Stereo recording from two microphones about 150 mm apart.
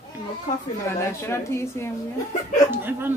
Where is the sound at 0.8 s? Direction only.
20° left (ahead or behind).